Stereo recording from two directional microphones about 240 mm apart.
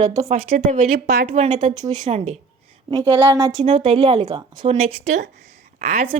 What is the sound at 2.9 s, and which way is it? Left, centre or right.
Speech, centre.